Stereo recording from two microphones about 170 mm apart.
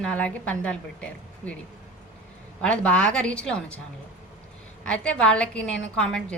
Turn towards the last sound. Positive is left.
turn(degrees=5)  # may be behind; listen again after turning